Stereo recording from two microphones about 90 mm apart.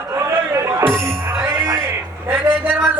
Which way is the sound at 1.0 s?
30° right (ahead or behind).